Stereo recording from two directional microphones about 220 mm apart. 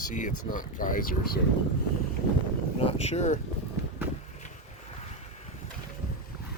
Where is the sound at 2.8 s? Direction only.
30° left (ahead or behind).